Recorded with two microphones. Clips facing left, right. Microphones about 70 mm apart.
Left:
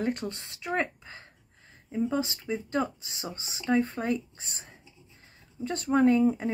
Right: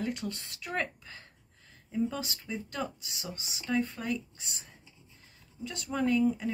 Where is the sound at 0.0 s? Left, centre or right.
Left.